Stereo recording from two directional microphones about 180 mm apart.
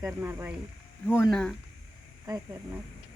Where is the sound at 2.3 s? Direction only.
20° right (ahead or behind).